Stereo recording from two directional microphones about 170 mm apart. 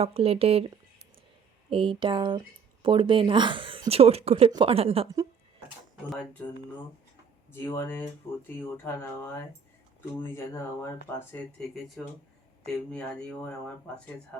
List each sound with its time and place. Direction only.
0.0 s speech: 35° right (ahead or behind)
1.7 s speech: 30° right (ahead or behind)
7.5 s speech: 15° left (ahead or behind)
12.0 s speech: 5° left (ahead or behind)